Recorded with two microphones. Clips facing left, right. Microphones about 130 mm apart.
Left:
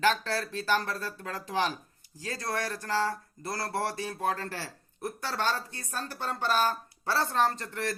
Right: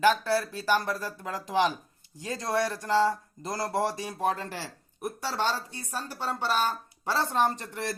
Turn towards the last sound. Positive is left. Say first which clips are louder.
# even
turn(degrees=-15)  # may be behind; listen again after turning